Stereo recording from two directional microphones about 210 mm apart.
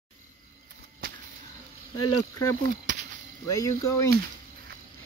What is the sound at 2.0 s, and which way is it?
Speech, 90° left.